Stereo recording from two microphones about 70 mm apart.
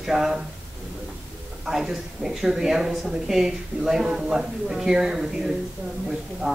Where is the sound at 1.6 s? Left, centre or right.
Centre.